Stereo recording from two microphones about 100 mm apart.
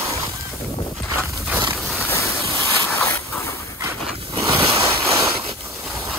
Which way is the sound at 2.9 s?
25° left (ahead or behind).